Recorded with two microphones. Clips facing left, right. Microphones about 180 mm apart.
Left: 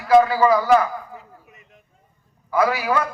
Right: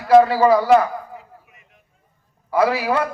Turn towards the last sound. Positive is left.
turn(degrees=-30)  # may be behind; listen again after turning